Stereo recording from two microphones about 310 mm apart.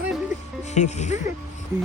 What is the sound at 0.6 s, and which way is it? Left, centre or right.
Speech, left.